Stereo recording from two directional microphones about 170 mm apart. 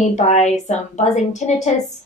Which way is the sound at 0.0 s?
45° left (ahead or behind).